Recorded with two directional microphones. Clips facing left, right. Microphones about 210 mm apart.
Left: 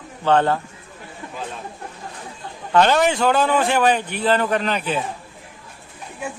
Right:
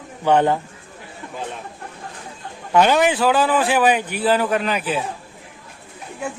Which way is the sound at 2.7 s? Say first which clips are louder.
Right 1 dB; 10° right (ahead or behind).